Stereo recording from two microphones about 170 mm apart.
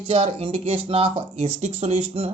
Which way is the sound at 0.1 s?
35° right (ahead or behind).